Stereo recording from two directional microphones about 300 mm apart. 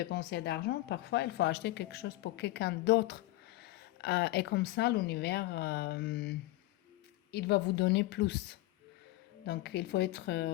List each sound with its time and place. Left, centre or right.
0.0 s a woman's voice: left
9.5 s a woman's voice: left